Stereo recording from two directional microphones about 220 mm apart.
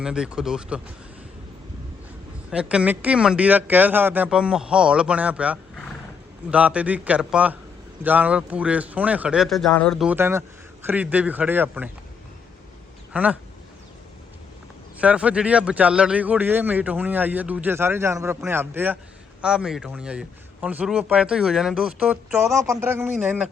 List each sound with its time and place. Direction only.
0.0 s speech: 5° right (ahead or behind)
2.5 s a man's voice: 5° right (ahead or behind)
13.1 s a man's voice: 5° right (ahead or behind)
15.0 s a man's voice: 5° right (ahead or behind)
22.6 s a man's voice: 10° right (ahead or behind)